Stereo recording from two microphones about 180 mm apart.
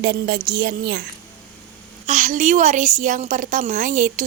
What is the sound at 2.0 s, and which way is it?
A woman's voice, 45° right (ahead or behind).